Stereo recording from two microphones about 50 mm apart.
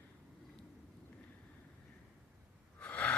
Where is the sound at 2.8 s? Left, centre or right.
Left.